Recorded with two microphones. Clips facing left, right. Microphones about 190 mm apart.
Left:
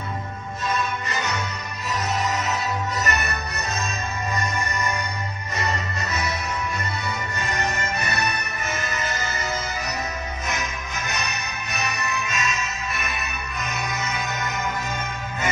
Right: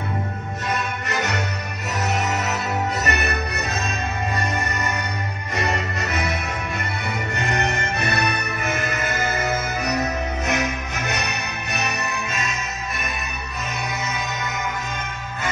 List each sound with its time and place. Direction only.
0.7 s music: 65° right (ahead or behind)
7.3 s music: 65° right (ahead or behind)
10.4 s music: 65° right (ahead or behind)